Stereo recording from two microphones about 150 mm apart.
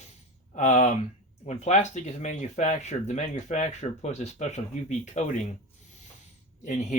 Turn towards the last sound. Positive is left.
turn(degrees=50)  # may be behind; listen again after turning